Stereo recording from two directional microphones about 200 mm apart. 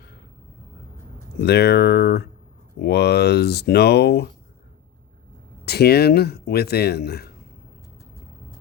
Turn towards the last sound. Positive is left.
turn(degrees=50)  # may be behind; listen again after turning